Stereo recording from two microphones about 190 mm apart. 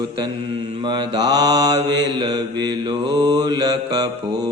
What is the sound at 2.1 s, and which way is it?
Mantra, 20° right (ahead or behind).